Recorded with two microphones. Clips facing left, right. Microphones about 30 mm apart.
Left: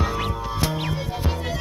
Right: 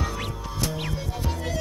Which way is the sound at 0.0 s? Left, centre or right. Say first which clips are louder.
Left 6 dB; left.